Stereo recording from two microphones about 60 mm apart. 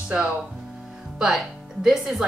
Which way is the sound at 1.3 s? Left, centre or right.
Centre.